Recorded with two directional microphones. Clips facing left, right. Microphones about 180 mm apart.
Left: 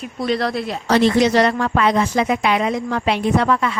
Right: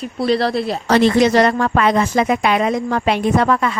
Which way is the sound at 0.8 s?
55° right (ahead or behind).